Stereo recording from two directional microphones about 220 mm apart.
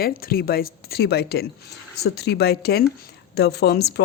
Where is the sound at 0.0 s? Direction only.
45° left (ahead or behind).